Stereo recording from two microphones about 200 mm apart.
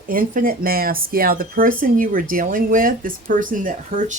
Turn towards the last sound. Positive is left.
turn(degrees=-40)  # may be behind; listen again after turning